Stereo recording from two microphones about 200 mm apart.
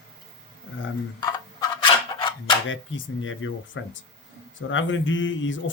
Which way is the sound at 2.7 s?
75° left (ahead or behind).